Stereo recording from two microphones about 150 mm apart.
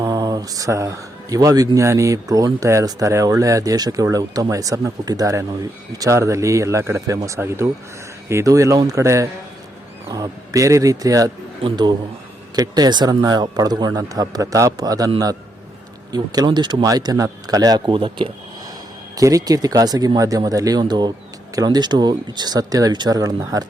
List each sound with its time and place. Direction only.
0.0 s speech: 25° right (ahead or behind)
16.1 s speech: 25° right (ahead or behind)
19.1 s speech: 25° right (ahead or behind)